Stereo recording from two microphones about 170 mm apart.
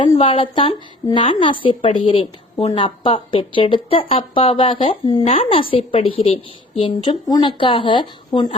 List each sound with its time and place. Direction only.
0.0 s a woman's voice: 30° left (ahead or behind)